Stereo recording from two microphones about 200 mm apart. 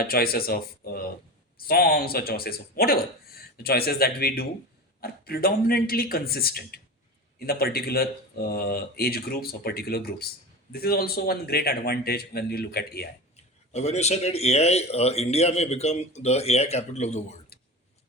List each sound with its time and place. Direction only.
0.0 s speech: 50° left (ahead or behind)
13.7 s a man's voice: 35° left (ahead or behind)